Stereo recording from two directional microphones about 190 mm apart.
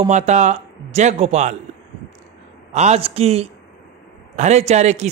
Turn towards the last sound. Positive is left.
turn(degrees=-35)  # may be behind; listen again after turning